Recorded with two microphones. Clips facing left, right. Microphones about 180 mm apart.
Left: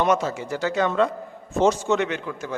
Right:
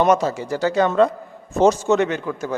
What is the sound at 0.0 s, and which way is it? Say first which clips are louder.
A man's voice: right 4 dB; 40° right (ahead or behind).